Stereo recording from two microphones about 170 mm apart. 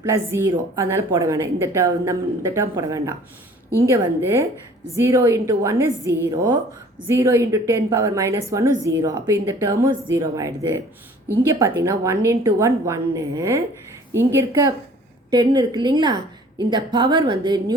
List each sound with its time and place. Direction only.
0.0 s a woman's voice: 15° right (ahead or behind)